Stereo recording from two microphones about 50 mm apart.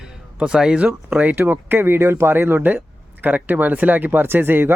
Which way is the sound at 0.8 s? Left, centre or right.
Right.